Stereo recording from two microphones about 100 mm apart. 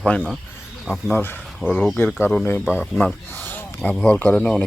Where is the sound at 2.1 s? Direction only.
20° left (ahead or behind).